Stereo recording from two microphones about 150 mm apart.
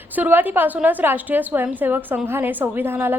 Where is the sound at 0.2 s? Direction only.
10° right (ahead or behind).